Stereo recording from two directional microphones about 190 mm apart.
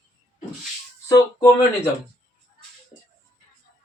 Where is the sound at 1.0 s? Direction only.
15° left (ahead or behind).